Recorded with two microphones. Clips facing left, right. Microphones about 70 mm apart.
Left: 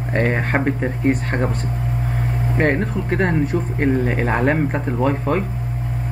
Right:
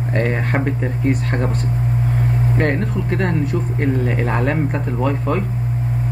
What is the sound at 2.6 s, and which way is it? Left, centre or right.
Speech, left.